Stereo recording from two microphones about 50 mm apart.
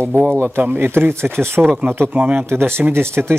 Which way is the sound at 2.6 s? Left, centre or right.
Right.